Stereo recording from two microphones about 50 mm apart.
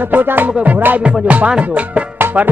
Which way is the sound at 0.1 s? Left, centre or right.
Right.